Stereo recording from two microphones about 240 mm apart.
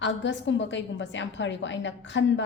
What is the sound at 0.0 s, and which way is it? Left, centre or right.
A woman's voice, left.